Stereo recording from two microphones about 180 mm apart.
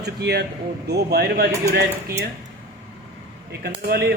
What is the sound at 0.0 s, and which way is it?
Speech, 65° right (ahead or behind).